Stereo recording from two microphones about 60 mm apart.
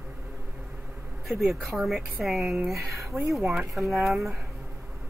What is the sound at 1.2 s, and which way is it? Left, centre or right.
Speech, centre.